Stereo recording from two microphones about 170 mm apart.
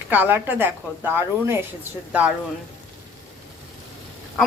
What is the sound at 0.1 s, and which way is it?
Speech, 10° right (ahead or behind).